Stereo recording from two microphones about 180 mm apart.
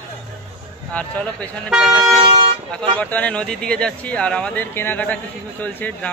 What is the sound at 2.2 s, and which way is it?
Toot, 30° right (ahead or behind).